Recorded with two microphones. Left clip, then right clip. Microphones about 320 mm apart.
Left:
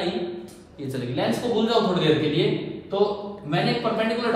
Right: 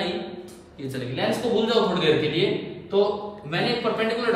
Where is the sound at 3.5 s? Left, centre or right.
Centre.